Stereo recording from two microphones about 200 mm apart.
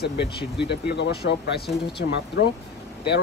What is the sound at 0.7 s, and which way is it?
Speech, 60° left (ahead or behind).